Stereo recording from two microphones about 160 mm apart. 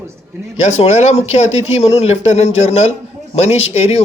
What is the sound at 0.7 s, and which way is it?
Speech, 45° left (ahead or behind).